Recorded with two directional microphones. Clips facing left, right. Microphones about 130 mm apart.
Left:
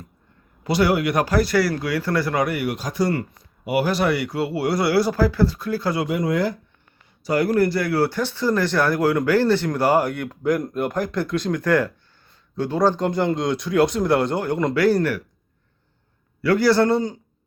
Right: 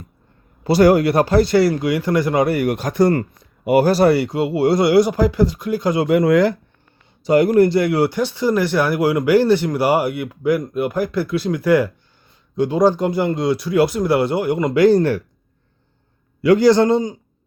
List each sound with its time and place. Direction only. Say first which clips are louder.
0.6 s speech: right 7 dB; 40° right (ahead or behind); by 2.5 s 20° right (ahead or behind)
2.5 s speech: right 6 dB; 45° right (ahead or behind)
4.3 s speech: right 6 dB; 20° right (ahead or behind)
6.1 s speech: right 11 dB; 70° right (ahead or behind)
7.3 s speech: right 6 dB; 20° right (ahead or behind)
16.4 s speech: right 5 dB; 20° right (ahead or behind)